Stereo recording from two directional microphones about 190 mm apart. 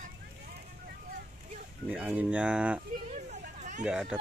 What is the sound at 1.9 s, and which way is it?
Speech, 10° right (ahead or behind).